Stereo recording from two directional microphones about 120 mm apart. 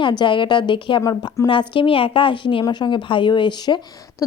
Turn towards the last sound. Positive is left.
turn(degrees=40)  # may be behind; listen again after turning